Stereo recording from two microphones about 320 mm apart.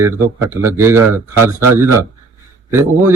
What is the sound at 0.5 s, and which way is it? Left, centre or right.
Speech, centre.